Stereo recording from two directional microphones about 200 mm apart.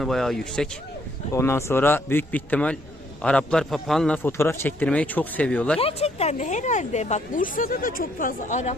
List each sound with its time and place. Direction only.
0.0 s a man's voice: centre (ahead or behind)
5.8 s speech: 30° left (ahead or behind)